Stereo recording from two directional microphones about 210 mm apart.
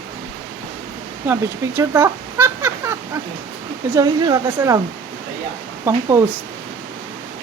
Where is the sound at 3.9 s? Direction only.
20° right (ahead or behind).